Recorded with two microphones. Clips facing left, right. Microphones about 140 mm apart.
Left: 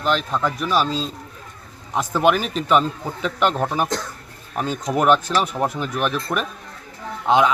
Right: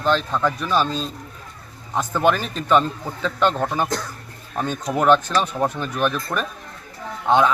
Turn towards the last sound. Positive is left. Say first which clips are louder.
# even
turn(degrees=15)  # may be behind; listen again after turning